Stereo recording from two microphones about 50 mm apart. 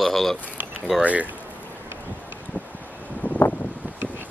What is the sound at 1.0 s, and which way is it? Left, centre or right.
Speech, right.